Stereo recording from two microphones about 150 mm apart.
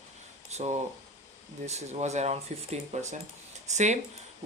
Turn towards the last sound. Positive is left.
turn(degrees=-50)  # may be behind; listen again after turning